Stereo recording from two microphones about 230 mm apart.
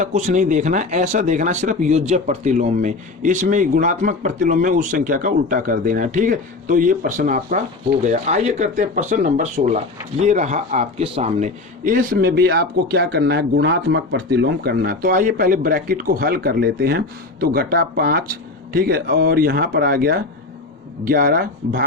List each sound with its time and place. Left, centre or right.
0.0 s speech: right